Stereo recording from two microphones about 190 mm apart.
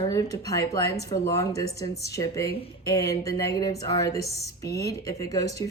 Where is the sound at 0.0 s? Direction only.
20° left (ahead or behind).